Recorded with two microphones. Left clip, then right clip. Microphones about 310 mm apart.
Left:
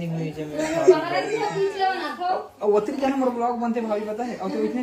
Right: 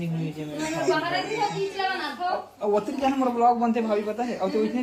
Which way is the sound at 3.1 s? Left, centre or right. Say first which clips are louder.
Right 2 dB; centre.